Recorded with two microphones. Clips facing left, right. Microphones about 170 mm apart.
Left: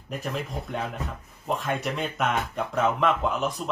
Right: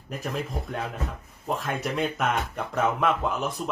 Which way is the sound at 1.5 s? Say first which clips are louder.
Left 1 dB; centre (ahead or behind).